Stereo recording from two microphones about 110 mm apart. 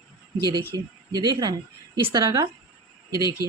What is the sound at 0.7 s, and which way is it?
A woman's voice, 35° right (ahead or behind).